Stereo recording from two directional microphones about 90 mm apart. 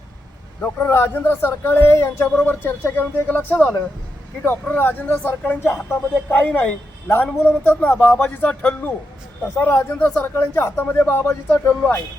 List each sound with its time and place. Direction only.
0.6 s a man's voice: 25° left (ahead or behind)